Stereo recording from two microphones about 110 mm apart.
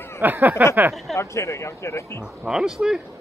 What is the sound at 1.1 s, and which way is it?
Speech, 25° left (ahead or behind).